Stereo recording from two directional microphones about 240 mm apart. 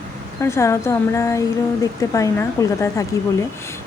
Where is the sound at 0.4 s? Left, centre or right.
Centre.